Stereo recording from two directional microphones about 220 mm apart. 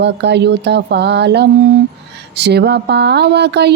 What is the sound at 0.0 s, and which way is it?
Speech, 50° right (ahead or behind).